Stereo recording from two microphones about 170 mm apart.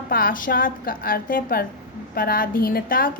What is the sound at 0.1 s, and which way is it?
A woman's voice, 55° left (ahead or behind).